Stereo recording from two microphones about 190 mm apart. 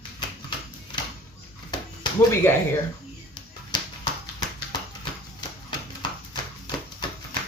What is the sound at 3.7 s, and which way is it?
Music, 20° left (ahead or behind).